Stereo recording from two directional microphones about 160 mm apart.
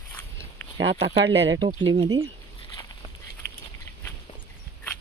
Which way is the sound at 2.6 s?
25° left (ahead or behind).